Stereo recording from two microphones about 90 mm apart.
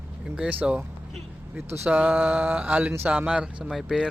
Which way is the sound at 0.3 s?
10° right (ahead or behind).